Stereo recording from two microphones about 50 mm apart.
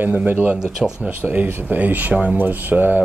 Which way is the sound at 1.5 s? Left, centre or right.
Right.